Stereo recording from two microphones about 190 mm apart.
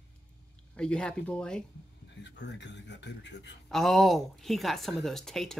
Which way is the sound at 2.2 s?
70° left (ahead or behind).